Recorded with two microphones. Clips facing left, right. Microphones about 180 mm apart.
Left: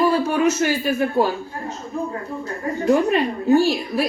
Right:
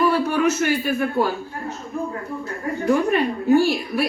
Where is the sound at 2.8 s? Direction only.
25° left (ahead or behind).